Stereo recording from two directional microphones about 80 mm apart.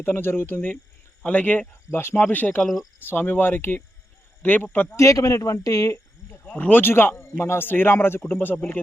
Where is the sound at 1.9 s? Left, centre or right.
Left.